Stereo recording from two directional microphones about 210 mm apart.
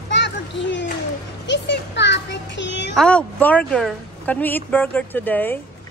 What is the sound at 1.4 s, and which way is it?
A child's voice, 55° left (ahead or behind).